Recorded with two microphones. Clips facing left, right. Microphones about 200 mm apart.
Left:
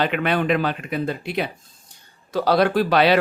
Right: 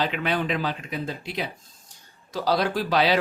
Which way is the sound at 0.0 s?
60° left (ahead or behind).